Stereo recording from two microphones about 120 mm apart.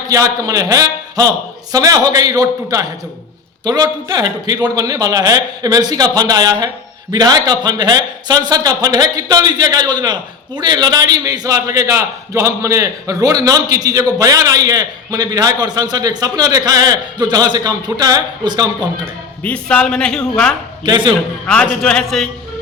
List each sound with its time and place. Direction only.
0.1 s a man's voice: 30° right (ahead or behind)
19.4 s speech: 10° left (ahead or behind)
20.8 s a man's voice: 40° right (ahead or behind)
21.4 s speech: 10° left (ahead or behind)